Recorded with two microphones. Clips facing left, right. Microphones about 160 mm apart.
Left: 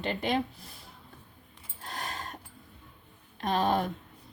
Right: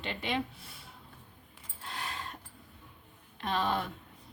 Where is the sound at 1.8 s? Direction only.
40° left (ahead or behind).